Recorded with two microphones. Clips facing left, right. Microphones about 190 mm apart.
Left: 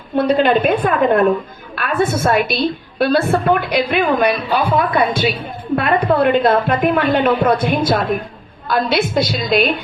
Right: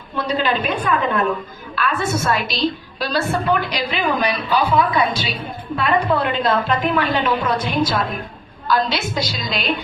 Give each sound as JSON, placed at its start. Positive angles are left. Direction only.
{"t": 0.2, "sound": "a woman's voice", "side_deg": 55}